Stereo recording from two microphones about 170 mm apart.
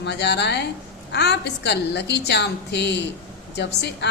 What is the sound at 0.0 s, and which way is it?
A woman's voice, 90° left.